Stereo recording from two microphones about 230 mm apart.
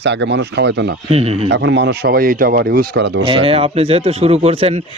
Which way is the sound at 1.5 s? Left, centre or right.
Right.